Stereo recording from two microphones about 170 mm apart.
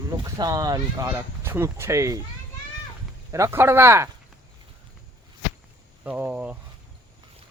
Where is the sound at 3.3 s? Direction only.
15° right (ahead or behind).